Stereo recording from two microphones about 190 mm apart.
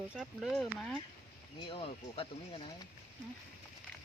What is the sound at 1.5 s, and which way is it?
Speech, 25° left (ahead or behind).